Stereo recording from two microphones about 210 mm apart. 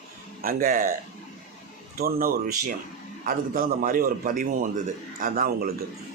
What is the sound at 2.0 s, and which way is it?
A man's voice, 45° right (ahead or behind).